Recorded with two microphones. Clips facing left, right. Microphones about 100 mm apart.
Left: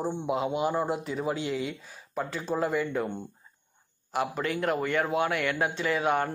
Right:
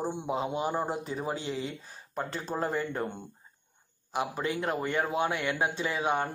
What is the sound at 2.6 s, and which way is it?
Speech, 30° right (ahead or behind).